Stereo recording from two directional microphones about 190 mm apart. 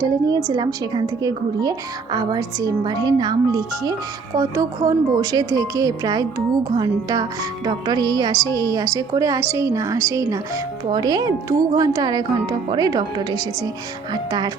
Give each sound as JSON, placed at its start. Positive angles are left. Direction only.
{"t": 0.0, "sound": "a woman's voice", "side_deg": -20}